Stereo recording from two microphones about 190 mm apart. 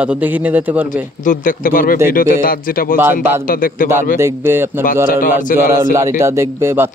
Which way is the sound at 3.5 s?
45° left (ahead or behind).